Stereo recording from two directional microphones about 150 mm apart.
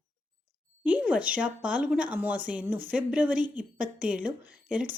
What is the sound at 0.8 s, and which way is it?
A woman's voice, 10° right (ahead or behind).